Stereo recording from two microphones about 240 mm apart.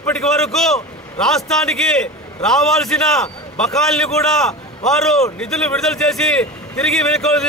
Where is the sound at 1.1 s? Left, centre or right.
Centre.